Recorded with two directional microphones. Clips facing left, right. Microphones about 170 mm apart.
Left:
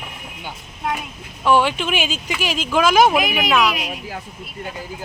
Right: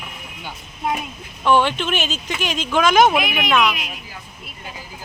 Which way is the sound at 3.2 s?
35° left (ahead or behind).